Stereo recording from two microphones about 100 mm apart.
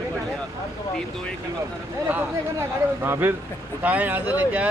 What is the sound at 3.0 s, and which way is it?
A man's voice, 25° right (ahead or behind).